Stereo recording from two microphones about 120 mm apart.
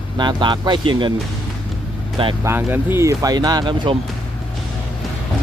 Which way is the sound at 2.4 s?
20° right (ahead or behind).